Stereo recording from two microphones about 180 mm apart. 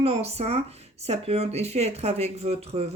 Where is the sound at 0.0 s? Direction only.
35° right (ahead or behind).